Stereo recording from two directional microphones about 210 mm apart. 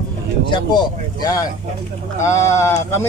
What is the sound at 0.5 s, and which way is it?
Speech, 20° left (ahead or behind).